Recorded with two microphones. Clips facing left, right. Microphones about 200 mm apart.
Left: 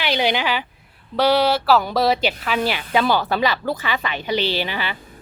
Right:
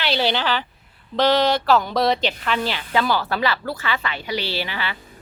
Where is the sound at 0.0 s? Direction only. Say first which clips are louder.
Left 1 dB; 15° left (ahead or behind).